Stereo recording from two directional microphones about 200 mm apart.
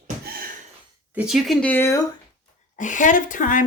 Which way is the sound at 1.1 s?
5° right (ahead or behind).